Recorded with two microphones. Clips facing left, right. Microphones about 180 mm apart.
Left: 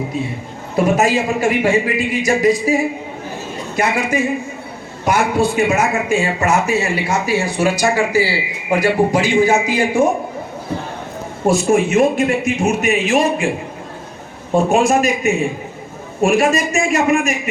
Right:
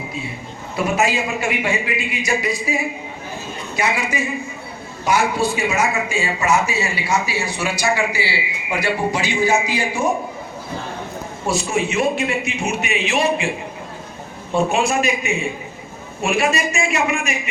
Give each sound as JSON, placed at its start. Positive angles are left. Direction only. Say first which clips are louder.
{"t": 0.9, "sound": "a man's voice", "louder": "left 4 dB", "side_deg": 45}
{"t": 11.4, "sound": "a man's voice", "louder": "left 7 dB", "side_deg": 50}
{"t": 14.5, "sound": "a man's voice", "louder": "left 5 dB", "side_deg": 45}